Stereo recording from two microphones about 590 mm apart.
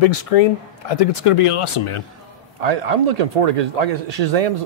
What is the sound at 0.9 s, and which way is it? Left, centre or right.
Speech, left.